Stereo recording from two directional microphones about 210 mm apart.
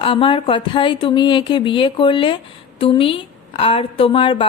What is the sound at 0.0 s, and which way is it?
Speech, 25° left (ahead or behind).